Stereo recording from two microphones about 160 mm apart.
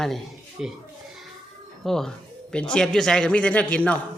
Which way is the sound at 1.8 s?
Centre (ahead or behind).